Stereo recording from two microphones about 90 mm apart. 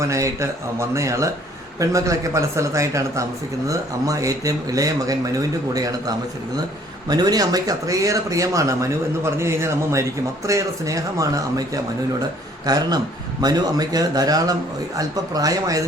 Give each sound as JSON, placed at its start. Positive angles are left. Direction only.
{"t": 0.0, "sound": "speech", "side_deg": -35}